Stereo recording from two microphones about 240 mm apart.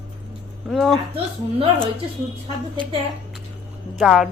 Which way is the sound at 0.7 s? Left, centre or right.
Centre.